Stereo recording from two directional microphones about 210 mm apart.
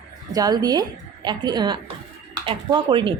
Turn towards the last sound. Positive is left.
turn(degrees=-20)  # may be behind; listen again after turning